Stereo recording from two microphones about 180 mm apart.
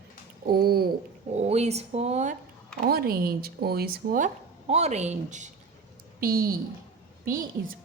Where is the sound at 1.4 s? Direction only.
35° right (ahead or behind).